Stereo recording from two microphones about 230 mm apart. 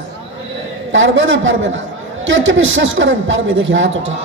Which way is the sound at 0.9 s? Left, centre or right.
Right.